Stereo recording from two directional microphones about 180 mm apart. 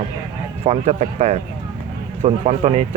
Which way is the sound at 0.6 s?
35° right (ahead or behind).